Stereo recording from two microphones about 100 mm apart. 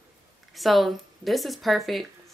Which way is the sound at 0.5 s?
Centre (ahead or behind).